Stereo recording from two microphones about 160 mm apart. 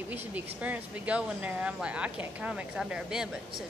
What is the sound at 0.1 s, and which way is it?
Speech, 10° right (ahead or behind).